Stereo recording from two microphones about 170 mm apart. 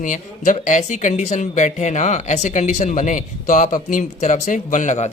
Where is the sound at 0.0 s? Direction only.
50° left (ahead or behind).